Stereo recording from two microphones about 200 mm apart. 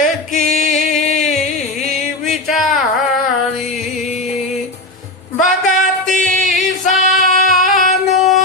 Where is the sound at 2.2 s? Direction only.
Centre (ahead or behind).